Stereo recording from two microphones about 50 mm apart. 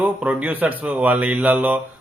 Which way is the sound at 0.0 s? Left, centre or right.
Right.